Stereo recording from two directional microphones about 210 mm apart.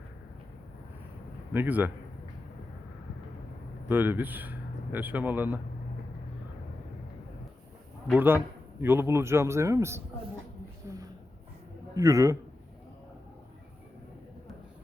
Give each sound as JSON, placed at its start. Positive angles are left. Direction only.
{"t": 1.5, "sound": "speech", "side_deg": -10}
{"t": 3.8, "sound": "speech", "side_deg": -10}
{"t": 8.0, "sound": "speech", "side_deg": -5}
{"t": 10.9, "sound": "a sound", "side_deg": -15}
{"t": 11.9, "sound": "speech", "side_deg": -15}